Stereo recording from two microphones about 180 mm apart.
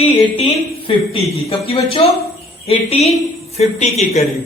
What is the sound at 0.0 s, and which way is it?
A man's voice, 30° left (ahead or behind).